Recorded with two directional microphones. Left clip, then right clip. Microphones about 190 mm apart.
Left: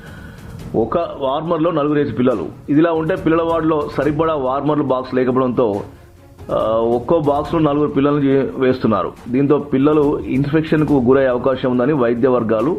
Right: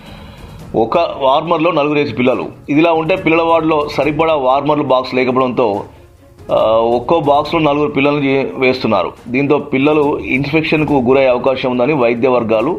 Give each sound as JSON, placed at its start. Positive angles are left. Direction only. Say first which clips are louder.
{"t": 0.9, "sound": "a man's voice", "louder": "right 6 dB", "side_deg": 20}